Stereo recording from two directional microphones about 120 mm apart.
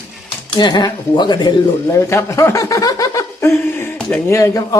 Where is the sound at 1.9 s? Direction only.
25° left (ahead or behind).